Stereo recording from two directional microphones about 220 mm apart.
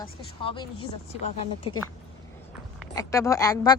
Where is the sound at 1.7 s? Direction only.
25° left (ahead or behind).